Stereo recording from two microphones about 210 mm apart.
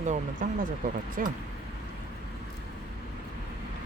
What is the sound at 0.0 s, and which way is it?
Speech, 35° right (ahead or behind).